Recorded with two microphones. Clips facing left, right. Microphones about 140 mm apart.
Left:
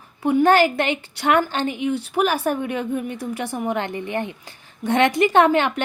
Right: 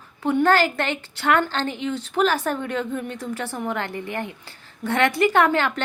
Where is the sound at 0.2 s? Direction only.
15° left (ahead or behind).